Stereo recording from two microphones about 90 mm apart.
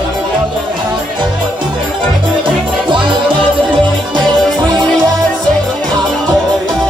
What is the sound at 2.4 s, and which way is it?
Music, 65° right (ahead or behind).